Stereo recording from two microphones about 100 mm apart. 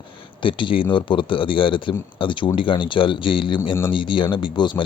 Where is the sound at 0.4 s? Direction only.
55° left (ahead or behind).